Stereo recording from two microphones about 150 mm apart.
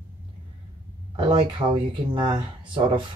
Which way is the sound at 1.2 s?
35° right (ahead or behind).